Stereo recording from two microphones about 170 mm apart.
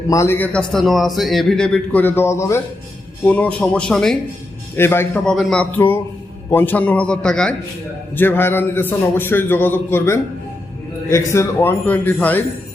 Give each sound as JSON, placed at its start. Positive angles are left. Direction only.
{"t": 0.1, "sound": "a man's voice", "side_deg": 15}
{"t": 4.8, "sound": "a man's voice", "side_deg": 15}